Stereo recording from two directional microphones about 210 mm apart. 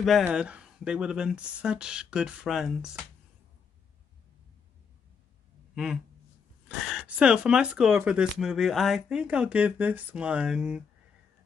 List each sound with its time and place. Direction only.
0.0 s speech: centre (ahead or behind)
6.9 s speech: 5° right (ahead or behind)